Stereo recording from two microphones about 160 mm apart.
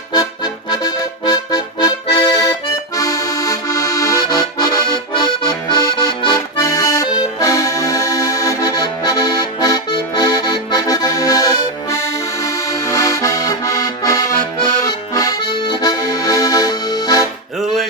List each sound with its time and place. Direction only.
0.1 s accordion: 25° left (ahead or behind)